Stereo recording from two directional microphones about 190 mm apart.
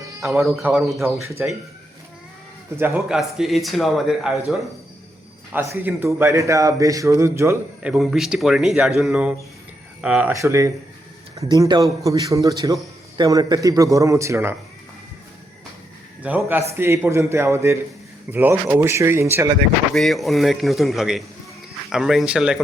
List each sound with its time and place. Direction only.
0.2 s a man's voice: centre (ahead or behind)
2.7 s a man's voice: 10° right (ahead or behind)
16.2 s a man's voice: 5° right (ahead or behind)
19.9 s a man's voice: centre (ahead or behind)